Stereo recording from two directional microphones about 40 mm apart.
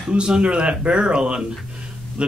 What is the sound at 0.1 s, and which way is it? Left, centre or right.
Speech, right.